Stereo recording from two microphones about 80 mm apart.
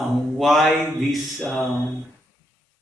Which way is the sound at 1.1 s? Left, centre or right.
Centre.